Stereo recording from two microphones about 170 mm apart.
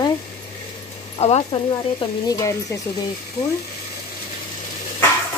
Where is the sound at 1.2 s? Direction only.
40° left (ahead or behind).